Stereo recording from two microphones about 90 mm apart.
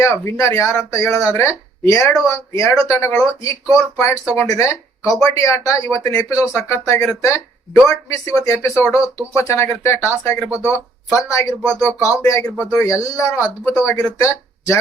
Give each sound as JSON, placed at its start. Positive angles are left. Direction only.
{"t": 0.0, "sound": "speech", "side_deg": 35}
{"t": 10.5, "sound": "speech", "side_deg": -20}
{"t": 11.2, "sound": "speech", "side_deg": 35}
{"t": 12.4, "sound": "speech", "side_deg": 15}
{"t": 12.8, "sound": "speech", "side_deg": 35}